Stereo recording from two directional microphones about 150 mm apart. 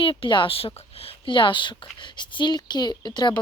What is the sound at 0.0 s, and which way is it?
Speech, 35° left (ahead or behind).